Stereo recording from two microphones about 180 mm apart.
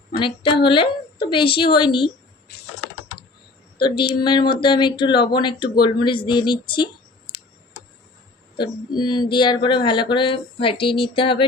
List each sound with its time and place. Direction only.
0.2 s speech: 30° left (ahead or behind)
3.8 s speech: 25° left (ahead or behind)
7.3 s tick: 60° left (ahead or behind)
8.5 s speech: 25° left (ahead or behind)